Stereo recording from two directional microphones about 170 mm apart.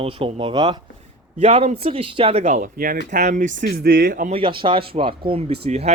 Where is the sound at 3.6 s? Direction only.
65° right (ahead or behind).